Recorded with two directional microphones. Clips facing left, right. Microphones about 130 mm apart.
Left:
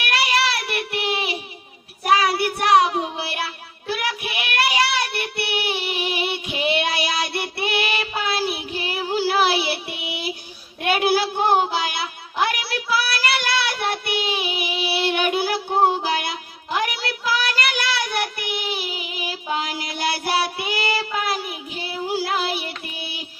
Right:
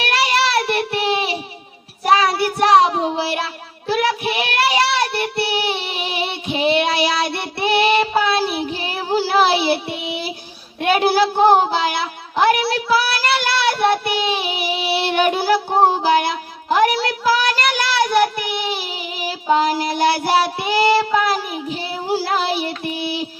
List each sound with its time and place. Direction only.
0.0 s child singing: 30° right (ahead or behind)